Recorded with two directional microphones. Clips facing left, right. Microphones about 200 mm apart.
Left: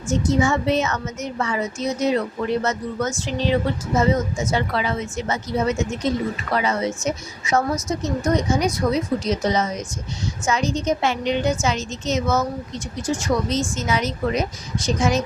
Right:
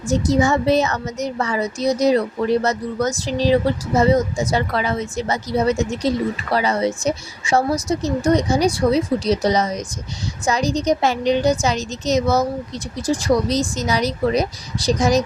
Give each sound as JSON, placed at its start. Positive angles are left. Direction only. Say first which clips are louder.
{"t": 0.1, "sound": "speech", "louder": "right 2 dB", "side_deg": -35}